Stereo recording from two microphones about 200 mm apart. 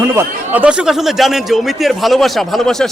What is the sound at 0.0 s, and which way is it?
A man's voice, 15° right (ahead or behind).